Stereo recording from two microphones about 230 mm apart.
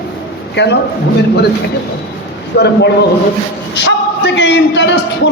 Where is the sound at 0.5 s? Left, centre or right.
Left.